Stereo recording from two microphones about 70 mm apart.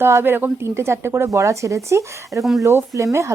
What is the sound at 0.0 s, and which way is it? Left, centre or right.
Speech, right.